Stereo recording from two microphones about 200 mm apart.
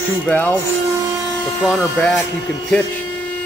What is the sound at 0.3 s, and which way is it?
Speech, 10° left (ahead or behind).